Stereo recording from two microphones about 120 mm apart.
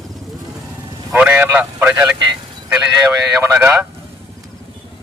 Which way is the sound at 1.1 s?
15° right (ahead or behind).